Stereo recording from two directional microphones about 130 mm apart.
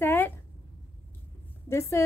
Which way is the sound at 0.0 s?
15° left (ahead or behind).